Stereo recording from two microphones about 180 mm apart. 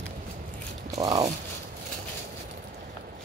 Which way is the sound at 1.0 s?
20° right (ahead or behind).